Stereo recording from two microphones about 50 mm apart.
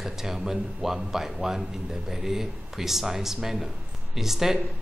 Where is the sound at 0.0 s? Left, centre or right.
Centre.